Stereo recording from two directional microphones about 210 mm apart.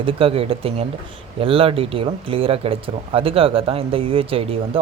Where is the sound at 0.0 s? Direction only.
25° right (ahead or behind).